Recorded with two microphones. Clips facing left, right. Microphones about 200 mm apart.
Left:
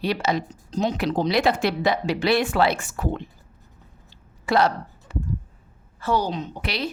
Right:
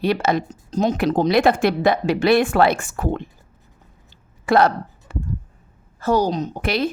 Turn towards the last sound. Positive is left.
turn(degrees=-50)  # may be behind; listen again after turning